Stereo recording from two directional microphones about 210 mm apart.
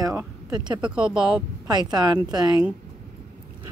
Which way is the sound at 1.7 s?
20° right (ahead or behind).